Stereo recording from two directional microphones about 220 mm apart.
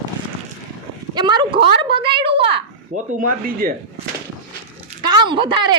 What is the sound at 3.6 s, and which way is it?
Speech, 40° right (ahead or behind).